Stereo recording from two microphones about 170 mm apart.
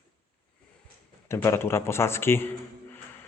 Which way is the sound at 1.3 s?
15° left (ahead or behind).